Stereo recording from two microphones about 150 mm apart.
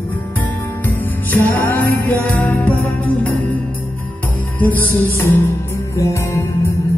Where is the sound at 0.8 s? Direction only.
10° left (ahead or behind).